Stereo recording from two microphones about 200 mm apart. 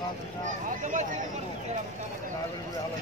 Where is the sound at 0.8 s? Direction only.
40° right (ahead or behind).